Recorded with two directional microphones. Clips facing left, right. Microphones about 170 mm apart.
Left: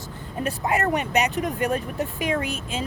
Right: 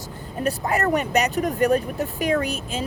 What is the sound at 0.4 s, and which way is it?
Speech, 40° right (ahead or behind).